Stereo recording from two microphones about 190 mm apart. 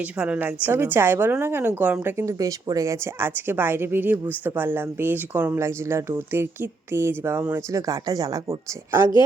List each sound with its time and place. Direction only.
0.0 s a woman's voice: 5° right (ahead or behind)